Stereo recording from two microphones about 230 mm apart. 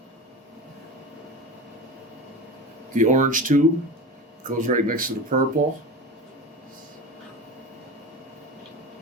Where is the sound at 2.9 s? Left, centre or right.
Right.